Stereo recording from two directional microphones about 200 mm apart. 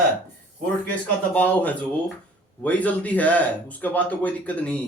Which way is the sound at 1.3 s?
10° left (ahead or behind).